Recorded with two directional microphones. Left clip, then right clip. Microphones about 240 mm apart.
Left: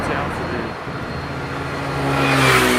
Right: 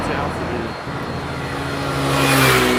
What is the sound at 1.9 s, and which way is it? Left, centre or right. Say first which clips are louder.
Vehicle: right 1 dB; right.